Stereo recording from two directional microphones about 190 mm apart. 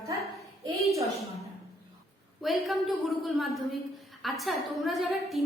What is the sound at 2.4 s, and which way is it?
A woman's voice, centre (ahead or behind).